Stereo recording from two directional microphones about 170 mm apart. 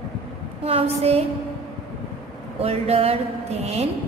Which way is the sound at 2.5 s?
35° right (ahead or behind).